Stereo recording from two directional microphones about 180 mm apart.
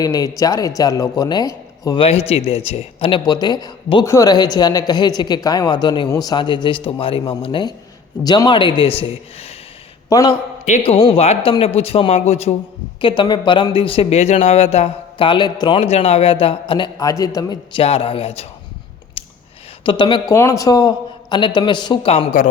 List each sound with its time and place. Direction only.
0.0 s a man's voice: 20° left (ahead or behind)
2.3 s a man's voice: 35° left (ahead or behind)
10.1 s a man's voice: 20° left (ahead or behind)
10.7 s a man's voice: 35° left (ahead or behind)
13.0 s a man's voice: 25° left (ahead or behind)
19.2 s a sound: 30° left (ahead or behind)
19.8 s a man's voice: 25° left (ahead or behind)
20.3 s a man's voice: 15° left (ahead or behind)